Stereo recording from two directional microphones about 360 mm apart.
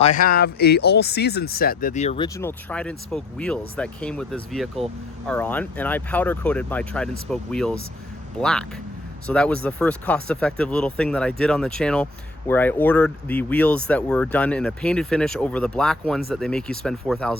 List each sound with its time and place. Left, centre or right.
0.0 s speech: left; by 17.3 s centre